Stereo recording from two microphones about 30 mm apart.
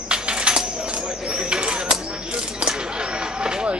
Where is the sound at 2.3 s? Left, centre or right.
Right.